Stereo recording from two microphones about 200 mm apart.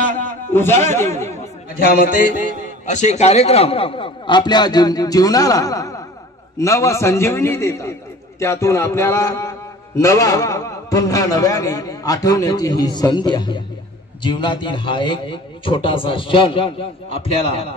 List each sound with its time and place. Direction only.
0.5 s a man's voice: 10° left (ahead or behind)
1.8 s a man's voice: 45° left (ahead or behind); by 17.4 s 25° left (ahead or behind)